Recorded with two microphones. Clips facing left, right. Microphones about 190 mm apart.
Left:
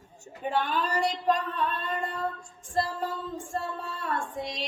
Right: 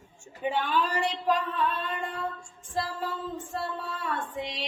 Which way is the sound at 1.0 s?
Centre (ahead or behind).